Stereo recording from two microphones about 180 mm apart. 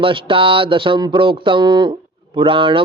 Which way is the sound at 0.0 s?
30° right (ahead or behind).